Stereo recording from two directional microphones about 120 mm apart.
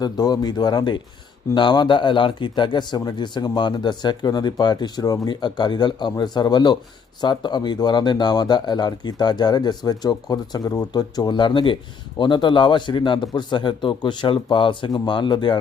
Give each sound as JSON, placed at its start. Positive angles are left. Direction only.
{"t": 0.0, "sound": "speech", "side_deg": 35}